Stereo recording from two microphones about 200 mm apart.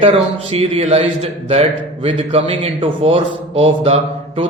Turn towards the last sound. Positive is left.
turn(degrees=-30)  # may be behind; listen again after turning